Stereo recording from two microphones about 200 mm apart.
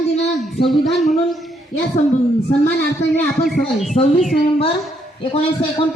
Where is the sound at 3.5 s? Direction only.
35° left (ahead or behind).